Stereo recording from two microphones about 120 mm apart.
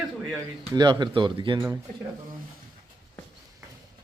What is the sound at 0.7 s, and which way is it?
Speech, 40° right (ahead or behind).